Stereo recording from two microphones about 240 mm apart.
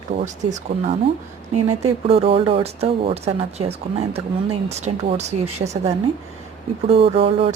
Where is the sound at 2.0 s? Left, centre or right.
Right.